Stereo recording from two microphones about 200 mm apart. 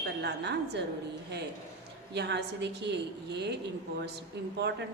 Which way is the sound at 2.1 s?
55° right (ahead or behind).